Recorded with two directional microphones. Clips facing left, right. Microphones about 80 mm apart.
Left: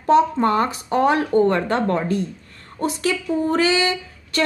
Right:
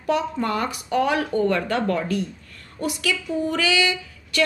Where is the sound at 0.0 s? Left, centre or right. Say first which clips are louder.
Left 7 dB; left.